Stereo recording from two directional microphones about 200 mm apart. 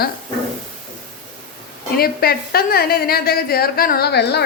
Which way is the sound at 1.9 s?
50° left (ahead or behind).